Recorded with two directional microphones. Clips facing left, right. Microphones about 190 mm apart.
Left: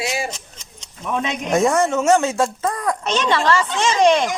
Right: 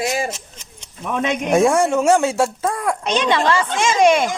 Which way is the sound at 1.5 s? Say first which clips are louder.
Right 2 dB; 10° right (ahead or behind).